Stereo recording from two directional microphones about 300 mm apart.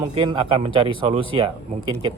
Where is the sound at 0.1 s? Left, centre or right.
Centre.